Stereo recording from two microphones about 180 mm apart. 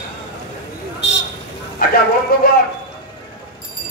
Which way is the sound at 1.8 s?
55° left (ahead or behind).